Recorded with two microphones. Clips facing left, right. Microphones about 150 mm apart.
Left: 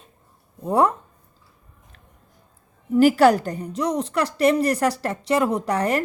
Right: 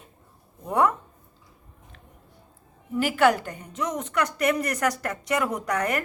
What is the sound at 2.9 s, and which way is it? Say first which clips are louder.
A woman's voice: left 6 dB; 40° left (ahead or behind).